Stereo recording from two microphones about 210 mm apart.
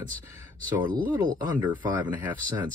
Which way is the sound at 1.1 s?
20° right (ahead or behind).